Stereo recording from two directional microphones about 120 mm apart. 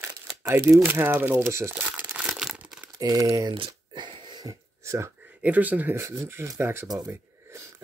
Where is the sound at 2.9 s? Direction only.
30° right (ahead or behind).